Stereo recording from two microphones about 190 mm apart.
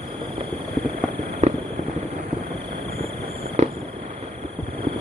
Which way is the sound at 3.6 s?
35° right (ahead or behind).